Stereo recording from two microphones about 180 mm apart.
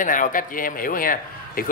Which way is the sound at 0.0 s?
45° left (ahead or behind).